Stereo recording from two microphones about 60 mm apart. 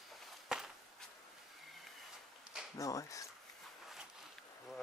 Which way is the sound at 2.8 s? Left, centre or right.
Left.